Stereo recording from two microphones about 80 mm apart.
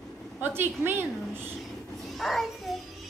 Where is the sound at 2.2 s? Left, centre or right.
Centre.